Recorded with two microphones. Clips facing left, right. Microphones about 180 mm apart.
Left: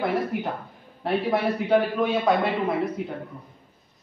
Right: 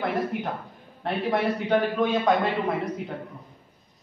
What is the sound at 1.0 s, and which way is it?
A man's voice, 5° left (ahead or behind).